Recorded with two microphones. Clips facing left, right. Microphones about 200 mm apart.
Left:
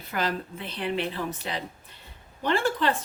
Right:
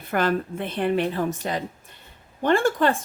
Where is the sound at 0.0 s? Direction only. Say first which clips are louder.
Right 6 dB; 55° right (ahead or behind).